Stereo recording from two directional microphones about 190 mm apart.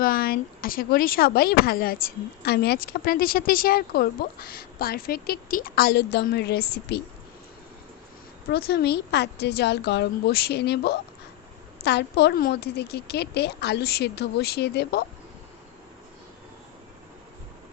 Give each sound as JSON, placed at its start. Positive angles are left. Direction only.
{"t": 0.0, "sound": "speech", "side_deg": 50}
{"t": 8.4, "sound": "a woman's voice", "side_deg": 60}